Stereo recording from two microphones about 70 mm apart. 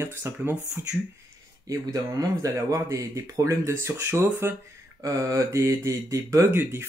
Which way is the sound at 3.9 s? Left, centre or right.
Right.